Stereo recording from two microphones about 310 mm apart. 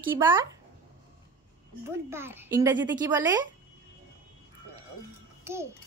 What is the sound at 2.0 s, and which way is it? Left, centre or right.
A child's voice, centre.